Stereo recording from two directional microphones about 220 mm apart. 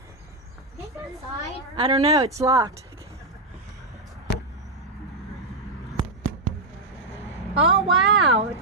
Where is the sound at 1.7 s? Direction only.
25° right (ahead or behind).